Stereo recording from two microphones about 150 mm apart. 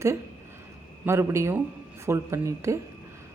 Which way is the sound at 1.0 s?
20° right (ahead or behind).